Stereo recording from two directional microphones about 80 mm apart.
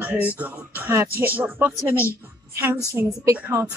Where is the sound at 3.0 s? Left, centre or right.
Right.